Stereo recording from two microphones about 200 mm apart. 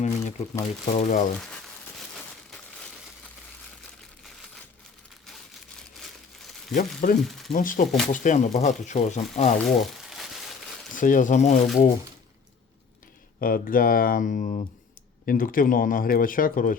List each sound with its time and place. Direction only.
0.0 s crumpling: 35° left (ahead or behind)
0.6 s speech: 35° left (ahead or behind)
6.0 s crumpling: centre (ahead or behind)
6.7 s speech: 40° left (ahead or behind)
7.3 s speech: centre (ahead or behind)
7.5 s speech: 40° left (ahead or behind)
9.6 s speech: centre (ahead or behind)
10.9 s speech: 40° left (ahead or behind)
13.4 s speech: 45° left (ahead or behind)
15.3 s speech: 45° left (ahead or behind)